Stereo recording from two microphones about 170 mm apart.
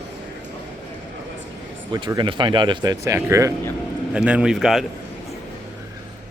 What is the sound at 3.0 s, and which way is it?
Speech, 15° right (ahead or behind).